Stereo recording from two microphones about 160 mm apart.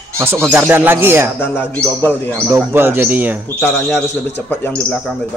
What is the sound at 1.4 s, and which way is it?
Speech, 15° left (ahead or behind).